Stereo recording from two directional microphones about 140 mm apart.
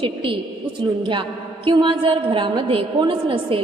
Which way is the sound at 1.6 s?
35° right (ahead or behind).